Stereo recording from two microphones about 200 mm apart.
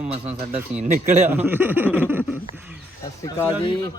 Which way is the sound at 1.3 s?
10° right (ahead or behind).